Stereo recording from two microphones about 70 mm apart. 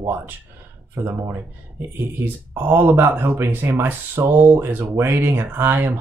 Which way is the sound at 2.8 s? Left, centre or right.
Right.